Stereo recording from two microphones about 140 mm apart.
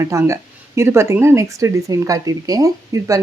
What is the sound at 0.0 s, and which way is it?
Speech, 20° right (ahead or behind).